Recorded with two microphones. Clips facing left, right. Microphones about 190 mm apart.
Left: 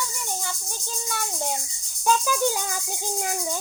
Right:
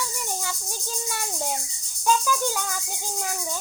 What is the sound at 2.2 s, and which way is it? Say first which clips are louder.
Music: left 2 dB; 15° left (ahead or behind).